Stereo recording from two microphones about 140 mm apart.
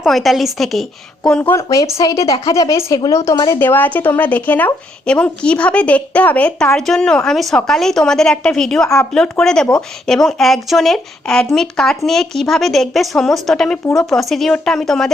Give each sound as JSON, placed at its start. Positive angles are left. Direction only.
{"t": 0.0, "sound": "speech", "side_deg": 0}
{"t": 1.3, "sound": "speech", "side_deg": 15}
{"t": 3.5, "sound": "a woman's voice", "side_deg": 15}